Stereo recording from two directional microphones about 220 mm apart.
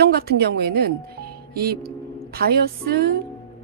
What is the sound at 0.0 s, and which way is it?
A woman's voice, 45° right (ahead or behind).